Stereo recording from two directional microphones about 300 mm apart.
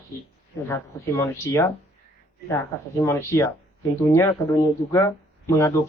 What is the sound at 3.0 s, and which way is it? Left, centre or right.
Speech, centre.